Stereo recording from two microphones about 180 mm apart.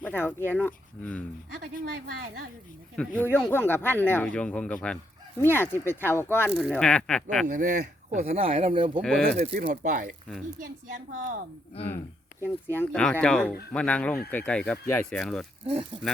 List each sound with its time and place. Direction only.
0.0 s speech: 10° left (ahead or behind)
2.9 s speech: 5° left (ahead or behind)
7.4 s speech: 45° right (ahead or behind); by 9.0 s 30° right (ahead or behind)
9.0 s speech: 5° left (ahead or behind)
9.6 s a woman's voice: 50° right (ahead or behind)
11.7 s speech: 35° left (ahead or behind)
12.6 s speech: 10° left (ahead or behind)